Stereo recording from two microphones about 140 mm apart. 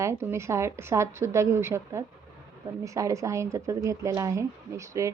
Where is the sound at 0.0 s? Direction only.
20° right (ahead or behind).